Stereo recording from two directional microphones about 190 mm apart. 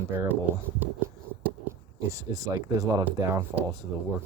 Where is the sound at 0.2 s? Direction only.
10° right (ahead or behind).